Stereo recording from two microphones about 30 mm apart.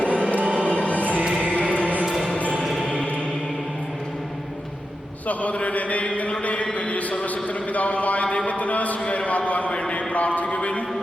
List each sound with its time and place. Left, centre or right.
0.0 s music: right
1.5 s music: left
5.3 s mantra: left
6.4 s a sound: left